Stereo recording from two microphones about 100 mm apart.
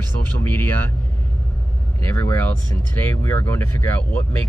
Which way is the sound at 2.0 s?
25° left (ahead or behind).